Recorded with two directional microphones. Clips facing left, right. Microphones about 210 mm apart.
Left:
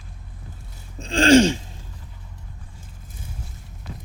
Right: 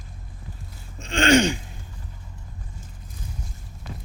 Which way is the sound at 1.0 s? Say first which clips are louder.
Left 4 dB; 30° left (ahead or behind).